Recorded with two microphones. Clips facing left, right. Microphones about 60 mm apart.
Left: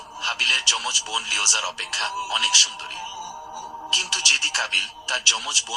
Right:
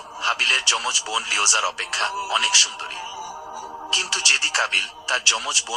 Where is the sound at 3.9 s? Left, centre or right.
Right.